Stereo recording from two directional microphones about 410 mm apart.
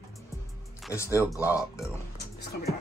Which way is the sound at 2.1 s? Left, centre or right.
Left.